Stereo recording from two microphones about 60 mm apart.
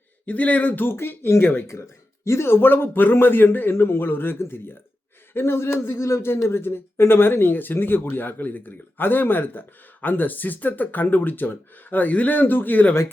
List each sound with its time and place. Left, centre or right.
0.3 s speech: left
2.2 s speech: left
6.0 s speech: left